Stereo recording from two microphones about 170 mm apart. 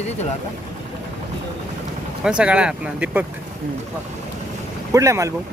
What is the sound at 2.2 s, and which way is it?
Speech, 5° right (ahead or behind).